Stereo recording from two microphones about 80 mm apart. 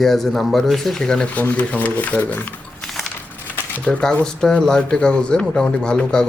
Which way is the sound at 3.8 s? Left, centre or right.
Centre.